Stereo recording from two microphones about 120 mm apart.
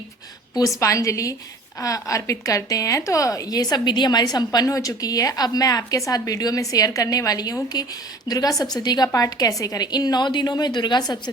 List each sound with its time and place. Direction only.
0.8 s a woman's voice: 25° left (ahead or behind)